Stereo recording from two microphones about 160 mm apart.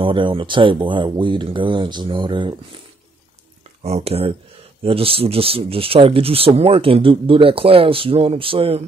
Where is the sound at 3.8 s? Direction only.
40° right (ahead or behind).